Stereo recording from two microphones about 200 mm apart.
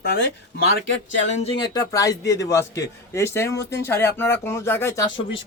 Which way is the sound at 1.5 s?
20° left (ahead or behind).